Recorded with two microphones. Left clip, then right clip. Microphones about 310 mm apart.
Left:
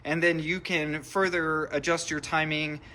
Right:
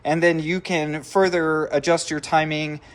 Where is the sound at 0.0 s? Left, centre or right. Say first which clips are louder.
Right 7 dB; centre.